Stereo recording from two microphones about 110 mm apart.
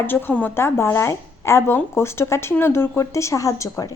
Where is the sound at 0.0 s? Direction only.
20° left (ahead or behind).